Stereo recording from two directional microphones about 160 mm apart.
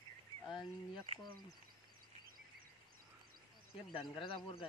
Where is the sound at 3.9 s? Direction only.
30° left (ahead or behind).